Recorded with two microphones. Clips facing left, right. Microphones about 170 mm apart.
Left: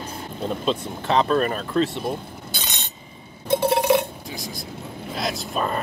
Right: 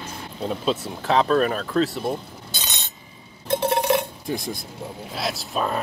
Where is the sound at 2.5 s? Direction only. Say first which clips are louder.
Even; 10° left (ahead or behind).